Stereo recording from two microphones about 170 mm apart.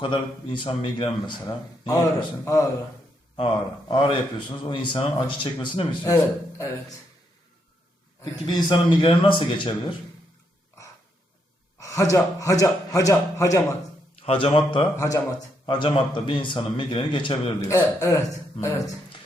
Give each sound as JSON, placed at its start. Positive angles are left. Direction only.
{"t": 0.0, "sound": "a man's voice", "side_deg": 30}
{"t": 3.3, "sound": "a man's voice", "side_deg": 30}
{"t": 8.2, "sound": "a man's voice", "side_deg": 25}
{"t": 11.8, "sound": "a man's voice", "side_deg": 20}
{"t": 14.2, "sound": "a man's voice", "side_deg": 35}
{"t": 17.7, "sound": "a man's voice", "side_deg": 15}